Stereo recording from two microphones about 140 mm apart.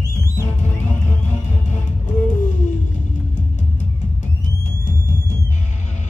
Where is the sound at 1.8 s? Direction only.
60° left (ahead or behind).